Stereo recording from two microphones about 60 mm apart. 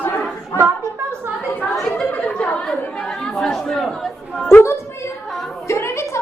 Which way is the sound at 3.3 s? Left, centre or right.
Centre.